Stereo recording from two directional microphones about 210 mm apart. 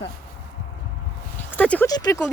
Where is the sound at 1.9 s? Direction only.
20° left (ahead or behind).